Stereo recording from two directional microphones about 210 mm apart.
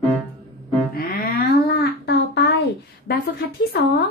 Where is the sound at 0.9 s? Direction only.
45° left (ahead or behind).